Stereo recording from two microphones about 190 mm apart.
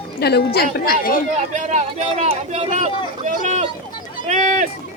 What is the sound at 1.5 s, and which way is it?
Speech, 40° right (ahead or behind).